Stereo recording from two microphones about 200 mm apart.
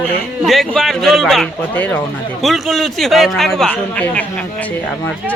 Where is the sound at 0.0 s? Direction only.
Centre (ahead or behind).